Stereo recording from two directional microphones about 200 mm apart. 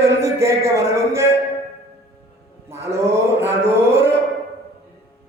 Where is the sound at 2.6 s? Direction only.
15° right (ahead or behind).